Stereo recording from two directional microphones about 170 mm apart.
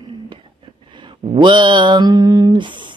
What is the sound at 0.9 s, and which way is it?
Mantra, 30° right (ahead or behind).